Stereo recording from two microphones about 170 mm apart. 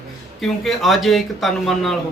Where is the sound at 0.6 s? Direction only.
Centre (ahead or behind).